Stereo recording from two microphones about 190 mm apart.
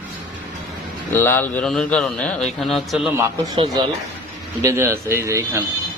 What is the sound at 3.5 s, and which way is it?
Speech, 25° right (ahead or behind).